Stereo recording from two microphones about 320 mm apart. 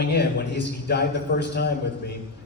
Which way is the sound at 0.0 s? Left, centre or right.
Left.